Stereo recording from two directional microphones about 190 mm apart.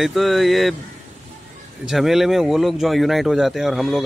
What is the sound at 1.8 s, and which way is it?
Speech, centre (ahead or behind).